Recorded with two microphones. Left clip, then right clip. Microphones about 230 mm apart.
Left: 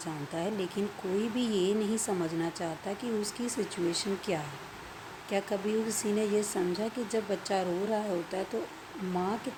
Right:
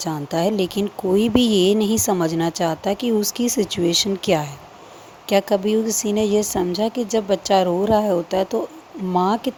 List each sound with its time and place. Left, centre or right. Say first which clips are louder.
0.0 s speech: right 14 dB; right